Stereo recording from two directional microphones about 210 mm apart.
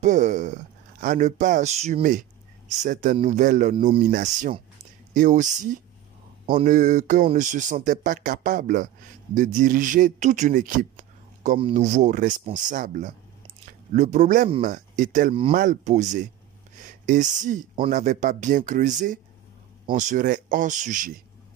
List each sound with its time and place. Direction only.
0.0 s speech: 35° right (ahead or behind)